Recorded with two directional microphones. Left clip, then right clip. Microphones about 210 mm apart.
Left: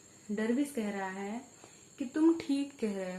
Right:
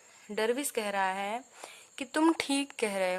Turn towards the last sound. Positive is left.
turn(degrees=-45)  # may be behind; listen again after turning